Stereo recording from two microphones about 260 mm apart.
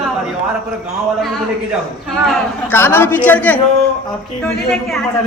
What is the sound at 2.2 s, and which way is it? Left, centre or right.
A man's voice, centre.